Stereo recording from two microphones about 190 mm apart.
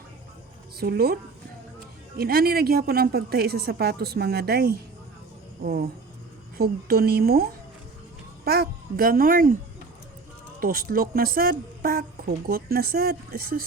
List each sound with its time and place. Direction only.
0.8 s a woman's voice: 55° right (ahead or behind)
6.6 s speech: 55° right (ahead or behind)
8.4 s a child's voice: 50° right (ahead or behind)
10.6 s speech: 50° right (ahead or behind)